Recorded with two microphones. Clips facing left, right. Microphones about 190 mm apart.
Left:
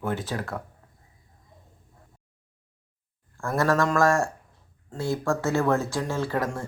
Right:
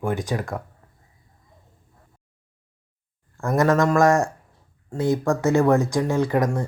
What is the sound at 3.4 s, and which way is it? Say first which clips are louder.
Speech: right 4 dB; 20° right (ahead or behind).